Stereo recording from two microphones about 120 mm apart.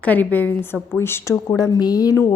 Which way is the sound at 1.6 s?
35° left (ahead or behind).